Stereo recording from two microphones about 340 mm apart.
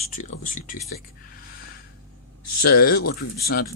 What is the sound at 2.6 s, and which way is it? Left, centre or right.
Speech, left.